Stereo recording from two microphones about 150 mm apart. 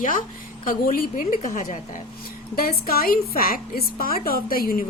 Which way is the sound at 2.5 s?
80° left.